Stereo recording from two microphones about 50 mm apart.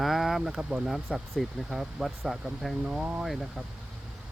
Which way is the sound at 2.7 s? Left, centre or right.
Centre.